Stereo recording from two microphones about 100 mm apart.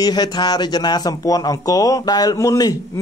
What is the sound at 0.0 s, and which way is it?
Speech, 45° left (ahead or behind).